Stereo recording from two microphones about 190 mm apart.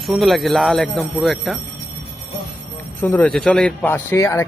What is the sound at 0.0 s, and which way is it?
Speech, centre (ahead or behind).